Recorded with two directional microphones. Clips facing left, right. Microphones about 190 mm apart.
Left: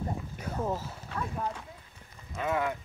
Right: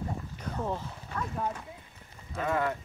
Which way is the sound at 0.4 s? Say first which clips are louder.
Left 1 dB; 5° left (ahead or behind).